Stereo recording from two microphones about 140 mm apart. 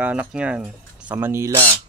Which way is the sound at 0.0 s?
10° right (ahead or behind).